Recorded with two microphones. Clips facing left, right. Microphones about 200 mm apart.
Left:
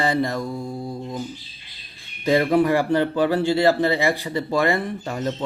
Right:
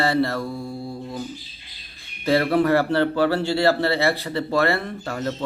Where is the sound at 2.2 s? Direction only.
15° left (ahead or behind).